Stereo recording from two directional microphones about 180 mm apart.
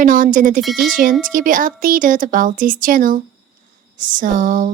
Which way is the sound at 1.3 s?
50° right (ahead or behind).